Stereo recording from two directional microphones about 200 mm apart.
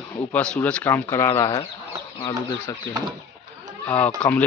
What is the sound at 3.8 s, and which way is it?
Speech, 5° left (ahead or behind).